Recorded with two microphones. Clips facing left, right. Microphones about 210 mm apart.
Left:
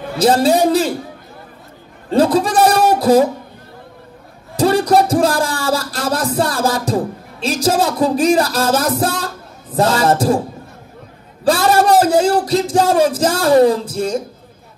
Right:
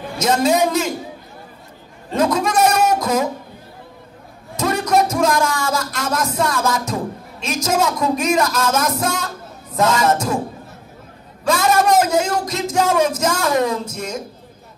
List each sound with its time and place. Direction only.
0.2 s a man's voice: 35° left (ahead or behind)
2.0 s a man's voice: 30° left (ahead or behind)
4.6 s speech: 30° left (ahead or behind)
11.4 s a man's voice: 35° left (ahead or behind)